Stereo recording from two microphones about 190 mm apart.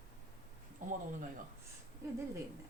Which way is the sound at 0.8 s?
45° right (ahead or behind).